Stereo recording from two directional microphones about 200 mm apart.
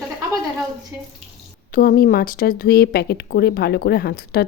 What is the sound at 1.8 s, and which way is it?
Speech, 45° left (ahead or behind).